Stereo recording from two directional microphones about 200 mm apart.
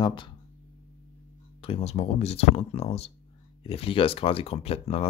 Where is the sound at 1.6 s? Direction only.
30° left (ahead or behind).